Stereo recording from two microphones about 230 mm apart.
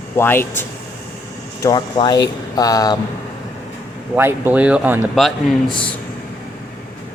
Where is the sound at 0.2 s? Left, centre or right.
Centre.